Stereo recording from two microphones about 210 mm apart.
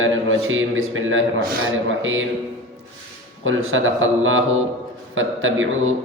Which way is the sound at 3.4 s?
70° right (ahead or behind).